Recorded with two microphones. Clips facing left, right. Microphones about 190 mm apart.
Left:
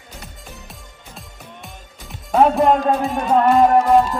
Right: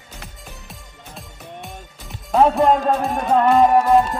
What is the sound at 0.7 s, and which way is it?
Music, centre (ahead or behind).